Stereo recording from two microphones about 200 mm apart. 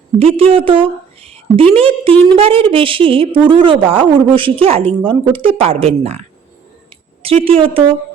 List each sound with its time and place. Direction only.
0.2 s a woman's voice: 30° right (ahead or behind)